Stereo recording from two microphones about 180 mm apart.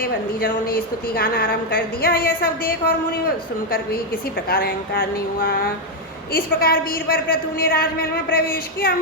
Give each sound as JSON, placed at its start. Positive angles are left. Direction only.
{"t": 0.0, "sound": "a woman's voice", "side_deg": 55}